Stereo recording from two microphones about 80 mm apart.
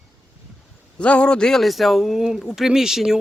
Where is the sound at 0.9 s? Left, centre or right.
Centre.